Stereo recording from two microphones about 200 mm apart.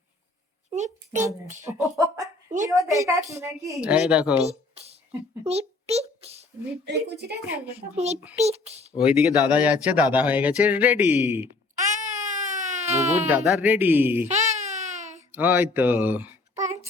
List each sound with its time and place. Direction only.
0.7 s a child's voice: 35° right (ahead or behind)
1.6 s speech: 15° right (ahead or behind)
4.4 s a sound: 30° right (ahead or behind)
5.4 s a child's voice: 30° right (ahead or behind)
6.8 s speech: 55° right (ahead or behind)
7.5 s speech: 10° right (ahead or behind)
7.9 s a child's voice: 35° right (ahead or behind)
9.0 s speech: 5° right (ahead or behind)
11.9 s baby cry: 35° right (ahead or behind)
13.2 s speech: 10° right (ahead or behind)
14.3 s baby cry: 35° right (ahead or behind)
15.3 s speech: 10° right (ahead or behind)